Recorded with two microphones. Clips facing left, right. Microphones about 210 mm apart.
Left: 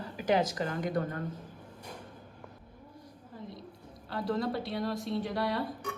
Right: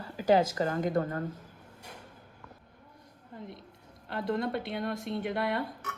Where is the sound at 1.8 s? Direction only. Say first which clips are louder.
Left 3 dB; 10° right (ahead or behind).